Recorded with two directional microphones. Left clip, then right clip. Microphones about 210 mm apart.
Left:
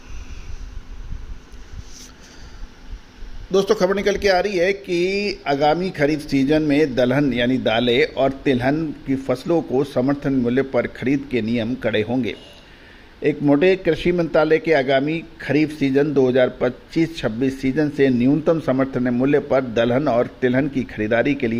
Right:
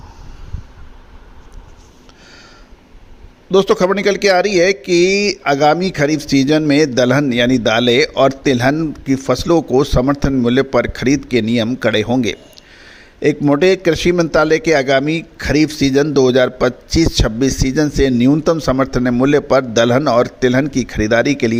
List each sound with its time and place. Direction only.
3.5 s a man's voice: 45° right (ahead or behind)